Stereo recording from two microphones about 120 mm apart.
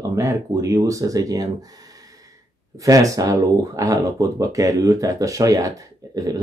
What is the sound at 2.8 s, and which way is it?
Speech, 30° right (ahead or behind).